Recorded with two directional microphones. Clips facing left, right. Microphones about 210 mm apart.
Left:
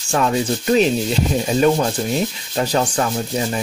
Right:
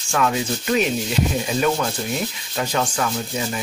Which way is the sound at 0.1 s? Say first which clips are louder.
Left 3 dB; 35° left (ahead or behind).